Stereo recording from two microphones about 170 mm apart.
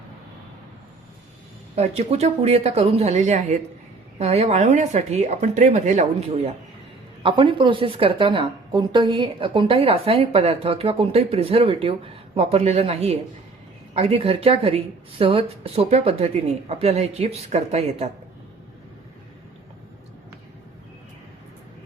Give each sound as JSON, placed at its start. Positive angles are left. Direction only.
{"t": 1.7, "sound": "a woman's voice", "side_deg": -40}